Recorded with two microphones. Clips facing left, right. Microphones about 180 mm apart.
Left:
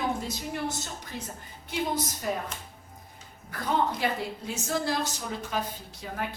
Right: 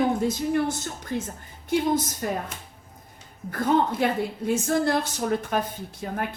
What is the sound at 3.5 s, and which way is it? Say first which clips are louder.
A woman's voice: right 5 dB; 50° right (ahead or behind).